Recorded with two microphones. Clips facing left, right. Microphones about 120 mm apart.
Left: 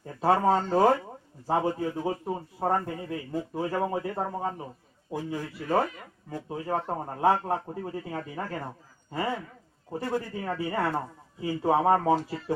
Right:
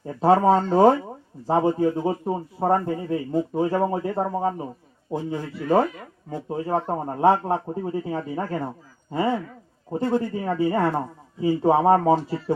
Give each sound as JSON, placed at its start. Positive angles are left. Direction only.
{"t": 0.0, "sound": "speech", "side_deg": -25}